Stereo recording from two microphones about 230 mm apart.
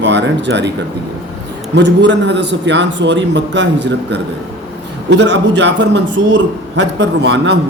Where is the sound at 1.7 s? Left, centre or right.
Right.